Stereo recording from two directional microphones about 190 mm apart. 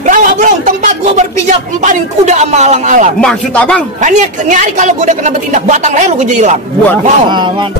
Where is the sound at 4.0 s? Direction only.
40° right (ahead or behind).